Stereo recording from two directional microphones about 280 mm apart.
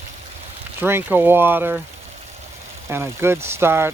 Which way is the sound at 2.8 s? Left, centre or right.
Centre.